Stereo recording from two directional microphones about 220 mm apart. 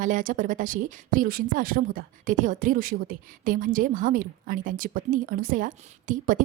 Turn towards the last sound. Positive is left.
turn(degrees=-35)  # may be behind; listen again after turning